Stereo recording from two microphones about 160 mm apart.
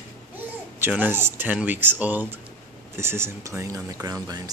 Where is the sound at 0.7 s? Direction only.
10° right (ahead or behind).